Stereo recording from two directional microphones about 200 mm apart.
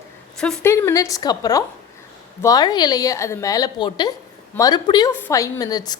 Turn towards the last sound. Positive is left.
turn(degrees=20)  # may be behind; listen again after turning